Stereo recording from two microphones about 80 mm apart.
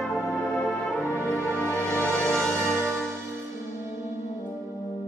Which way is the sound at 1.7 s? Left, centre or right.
Centre.